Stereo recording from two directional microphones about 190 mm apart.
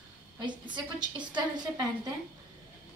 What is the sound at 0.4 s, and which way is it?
Speech, 25° right (ahead or behind).